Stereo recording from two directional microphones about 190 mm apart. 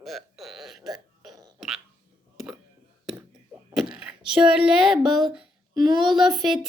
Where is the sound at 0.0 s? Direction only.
Centre (ahead or behind).